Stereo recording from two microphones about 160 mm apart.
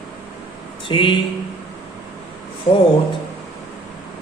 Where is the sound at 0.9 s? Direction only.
30° left (ahead or behind).